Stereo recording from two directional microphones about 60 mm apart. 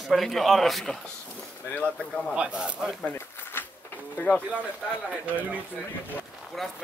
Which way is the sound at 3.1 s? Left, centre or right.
Left.